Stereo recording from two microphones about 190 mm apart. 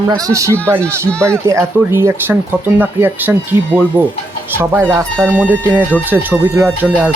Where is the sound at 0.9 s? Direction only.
15° right (ahead or behind).